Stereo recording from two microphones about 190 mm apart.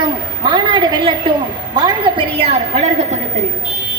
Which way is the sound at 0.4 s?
25° right (ahead or behind).